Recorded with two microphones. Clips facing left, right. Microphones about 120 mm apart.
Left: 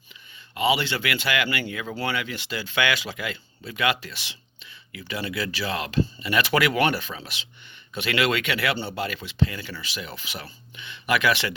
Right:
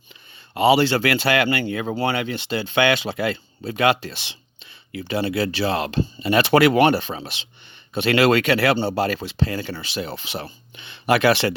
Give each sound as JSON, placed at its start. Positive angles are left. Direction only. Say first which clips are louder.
{"t": 0.5, "sound": "speech", "louder": "right 7 dB", "side_deg": -35}